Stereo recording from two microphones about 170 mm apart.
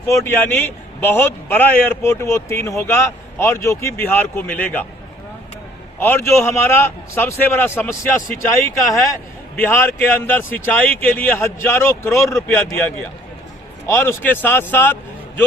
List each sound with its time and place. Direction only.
0.1 s a man's voice: 10° left (ahead or behind)
6.0 s a man's voice: 15° left (ahead or behind)
13.8 s a man's voice: 15° left (ahead or behind)